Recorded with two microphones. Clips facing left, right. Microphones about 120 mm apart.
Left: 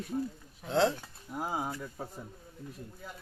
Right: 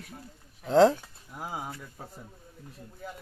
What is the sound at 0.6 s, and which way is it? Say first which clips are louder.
Speech: right 8 dB; 40° right (ahead or behind).